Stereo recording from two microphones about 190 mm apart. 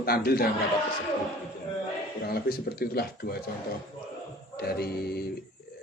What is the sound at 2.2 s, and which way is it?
Speech, 55° left (ahead or behind).